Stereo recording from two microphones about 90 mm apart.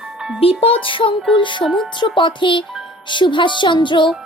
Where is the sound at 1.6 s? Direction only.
5° left (ahead or behind).